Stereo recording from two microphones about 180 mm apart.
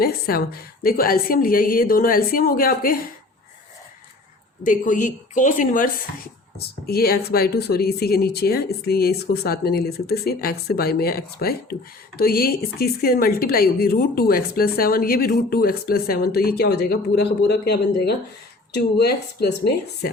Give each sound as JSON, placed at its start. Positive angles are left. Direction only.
{"t": 0.0, "sound": "a woman's voice", "side_deg": 55}
{"t": 4.6, "sound": "a woman's voice", "side_deg": 50}
{"t": 6.6, "sound": "speech", "side_deg": 60}